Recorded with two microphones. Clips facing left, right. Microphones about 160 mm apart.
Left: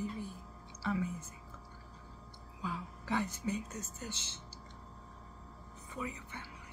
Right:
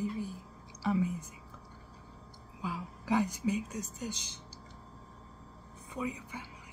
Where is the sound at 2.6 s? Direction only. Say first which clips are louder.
Right 2 dB; 10° right (ahead or behind).